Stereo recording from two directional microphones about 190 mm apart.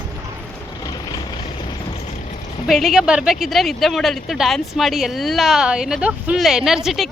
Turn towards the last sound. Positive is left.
turn(degrees=0)  # may be behind; listen again after turning